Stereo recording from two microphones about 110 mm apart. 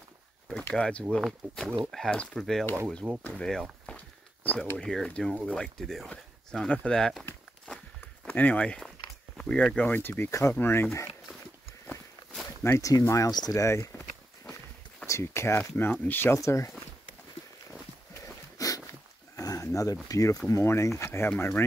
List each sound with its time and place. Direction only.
0.7 s speech: 10° left (ahead or behind)
3.8 s a sound: 10° left (ahead or behind)
5.5 s speech: 5° left (ahead or behind)
8.0 s a sound: 15° left (ahead or behind)
9.7 s speech: 15° left (ahead or behind)
12.4 s speech: 25° left (ahead or behind)
15.0 s speech: 25° left (ahead or behind)
18.2 s a sound: 30° left (ahead or behind)
19.3 s speech: 30° left (ahead or behind)